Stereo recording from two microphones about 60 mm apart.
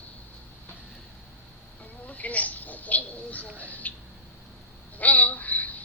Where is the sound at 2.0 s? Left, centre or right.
Left.